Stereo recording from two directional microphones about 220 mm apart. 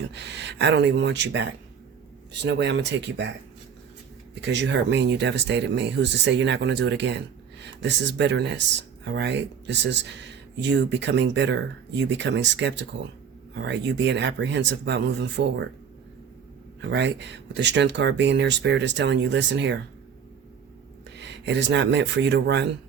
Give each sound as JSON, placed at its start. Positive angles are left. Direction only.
{"t": 0.1, "sound": "speech", "side_deg": -50}
{"t": 4.4, "sound": "speech", "side_deg": -50}
{"t": 16.8, "sound": "speech", "side_deg": -50}
{"t": 21.2, "sound": "speech", "side_deg": -50}